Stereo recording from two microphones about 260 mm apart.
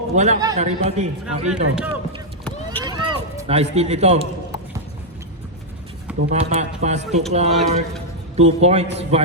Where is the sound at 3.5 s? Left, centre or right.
Right.